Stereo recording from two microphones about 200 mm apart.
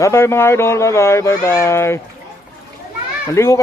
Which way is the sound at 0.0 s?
15° left (ahead or behind).